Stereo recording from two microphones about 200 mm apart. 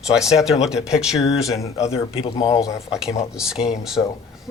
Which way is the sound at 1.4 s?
15° left (ahead or behind).